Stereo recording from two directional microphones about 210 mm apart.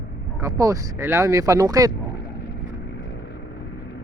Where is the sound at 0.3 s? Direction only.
15° right (ahead or behind).